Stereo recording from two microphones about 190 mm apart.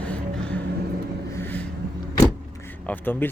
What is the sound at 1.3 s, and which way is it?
Vehicle, 10° left (ahead or behind).